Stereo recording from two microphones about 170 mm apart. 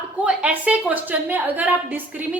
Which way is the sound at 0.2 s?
10° right (ahead or behind).